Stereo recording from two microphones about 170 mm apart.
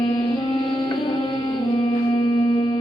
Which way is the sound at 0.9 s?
30° left (ahead or behind).